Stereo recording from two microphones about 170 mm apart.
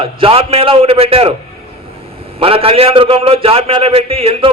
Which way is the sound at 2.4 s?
35° right (ahead or behind).